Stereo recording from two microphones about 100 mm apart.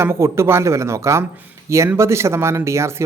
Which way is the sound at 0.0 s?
25° right (ahead or behind).